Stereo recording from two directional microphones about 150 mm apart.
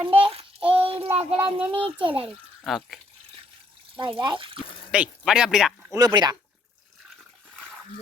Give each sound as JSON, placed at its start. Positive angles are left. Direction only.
{"t": 0.1, "sound": "child singing", "side_deg": -40}
{"t": 1.1, "sound": "speech", "side_deg": -40}
{"t": 2.6, "sound": "speech", "side_deg": 0}
{"t": 3.9, "sound": "speech", "side_deg": -30}
{"t": 4.9, "sound": "speech", "side_deg": -5}
{"t": 5.9, "sound": "speech", "side_deg": -25}